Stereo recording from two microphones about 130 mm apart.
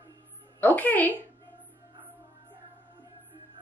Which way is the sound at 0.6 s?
15° left (ahead or behind).